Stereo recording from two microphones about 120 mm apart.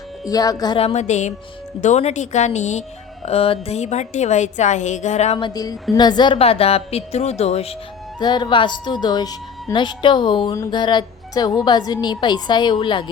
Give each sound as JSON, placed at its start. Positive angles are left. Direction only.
{"t": 0.3, "sound": "a woman's voice", "side_deg": 30}
{"t": 0.9, "sound": "a woman's voice", "side_deg": 80}
{"t": 3.2, "sound": "a woman's voice", "side_deg": 55}
{"t": 5.4, "sound": "a woman's voice", "side_deg": 30}
{"t": 6.3, "sound": "a woman's voice", "side_deg": 55}
{"t": 8.2, "sound": "a woman's voice", "side_deg": 35}